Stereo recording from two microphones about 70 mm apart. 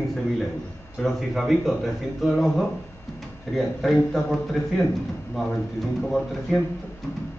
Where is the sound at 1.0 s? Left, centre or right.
Centre.